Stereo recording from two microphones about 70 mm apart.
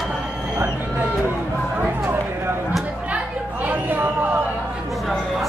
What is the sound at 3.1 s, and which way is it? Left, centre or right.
Chatter, right.